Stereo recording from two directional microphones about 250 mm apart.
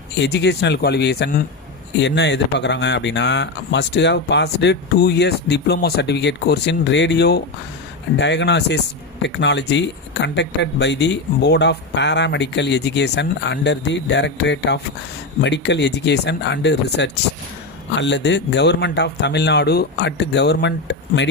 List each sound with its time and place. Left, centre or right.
0.2 s speech: left